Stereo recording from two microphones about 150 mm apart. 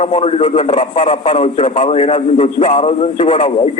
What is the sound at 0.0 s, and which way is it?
A man's voice, 40° left (ahead or behind).